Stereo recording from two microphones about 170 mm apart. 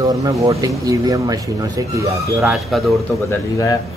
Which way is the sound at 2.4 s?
Centre (ahead or behind).